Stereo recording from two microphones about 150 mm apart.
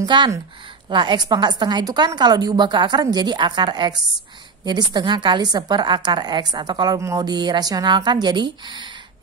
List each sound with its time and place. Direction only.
0.0 s a woman's voice: 30° right (ahead or behind)